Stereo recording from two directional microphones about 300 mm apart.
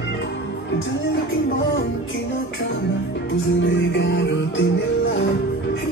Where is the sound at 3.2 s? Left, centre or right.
Left.